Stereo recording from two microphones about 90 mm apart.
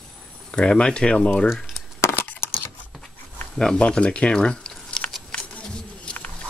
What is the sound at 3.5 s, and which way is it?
Speech, 10° left (ahead or behind).